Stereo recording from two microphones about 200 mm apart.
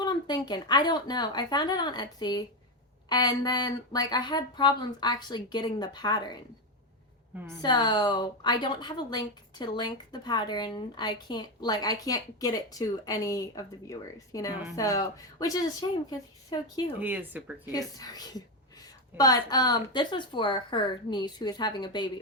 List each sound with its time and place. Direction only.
0.0 s speech: 20° left (ahead or behind)
7.6 s speech: 20° left (ahead or behind)
17.0 s speech: 10° right (ahead or behind)
17.7 s speech: 20° left (ahead or behind)